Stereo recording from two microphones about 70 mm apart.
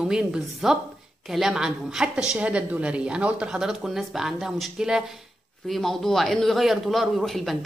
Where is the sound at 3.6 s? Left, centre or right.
Centre.